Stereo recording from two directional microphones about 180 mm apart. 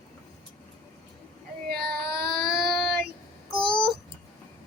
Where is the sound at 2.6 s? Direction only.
Centre (ahead or behind).